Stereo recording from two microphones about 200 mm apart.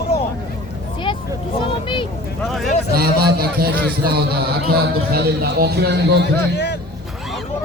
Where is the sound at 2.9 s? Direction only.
50° right (ahead or behind).